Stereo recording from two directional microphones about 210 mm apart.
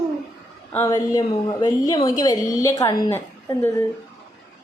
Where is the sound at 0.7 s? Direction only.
15° left (ahead or behind).